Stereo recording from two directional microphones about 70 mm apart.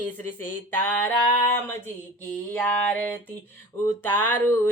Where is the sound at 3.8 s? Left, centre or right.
Left.